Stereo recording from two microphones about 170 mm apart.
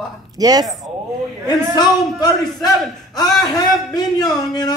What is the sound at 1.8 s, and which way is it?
Speech, 25° left (ahead or behind).